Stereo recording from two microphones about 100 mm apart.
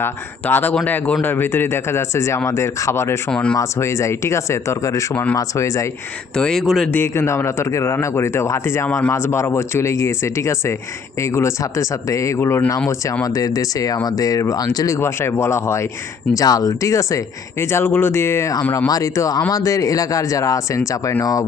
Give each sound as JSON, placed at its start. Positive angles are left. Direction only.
{"t": 0.0, "sound": "speech", "side_deg": 20}
{"t": 3.2, "sound": "speech", "side_deg": 10}
{"t": 3.6, "sound": "speech", "side_deg": 30}
{"t": 6.3, "sound": "speech", "side_deg": 5}
{"t": 6.9, "sound": "speech", "side_deg": 25}
{"t": 13.2, "sound": "speech", "side_deg": 35}